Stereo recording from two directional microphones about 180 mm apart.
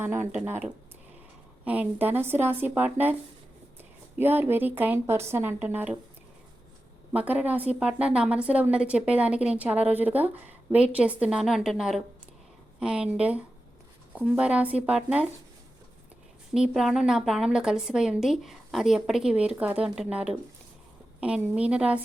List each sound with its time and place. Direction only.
0.0 s a woman's voice: 15° right (ahead or behind)
4.2 s a woman's voice: 10° right (ahead or behind)
7.1 s a woman's voice: 10° right (ahead or behind)
16.6 s a woman's voice: 5° right (ahead or behind)